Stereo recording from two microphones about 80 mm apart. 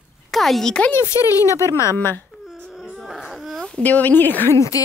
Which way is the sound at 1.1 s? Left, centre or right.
Left.